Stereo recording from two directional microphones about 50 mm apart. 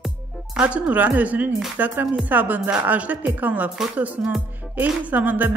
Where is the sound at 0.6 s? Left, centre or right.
Right.